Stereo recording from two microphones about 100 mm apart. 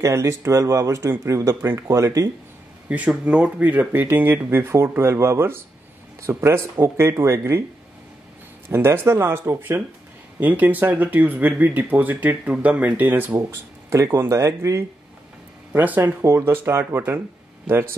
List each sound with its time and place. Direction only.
0.0 s speech: 30° right (ahead or behind)
2.9 s speech: 15° right (ahead or behind)
8.6 s speech: 20° right (ahead or behind)
15.7 s speech: 20° right (ahead or behind)